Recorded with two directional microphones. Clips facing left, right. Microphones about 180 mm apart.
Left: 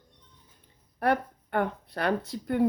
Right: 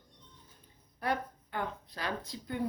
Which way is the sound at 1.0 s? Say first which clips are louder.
Left 8 dB; 60° left (ahead or behind).